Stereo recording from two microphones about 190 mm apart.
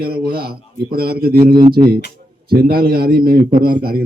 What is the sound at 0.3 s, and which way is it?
A man's voice, 55° right (ahead or behind).